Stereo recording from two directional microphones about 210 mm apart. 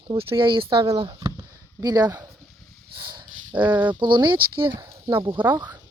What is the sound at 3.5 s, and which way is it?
Speech, 5° right (ahead or behind).